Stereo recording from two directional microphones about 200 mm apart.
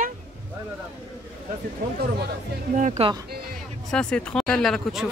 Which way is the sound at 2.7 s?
35° right (ahead or behind).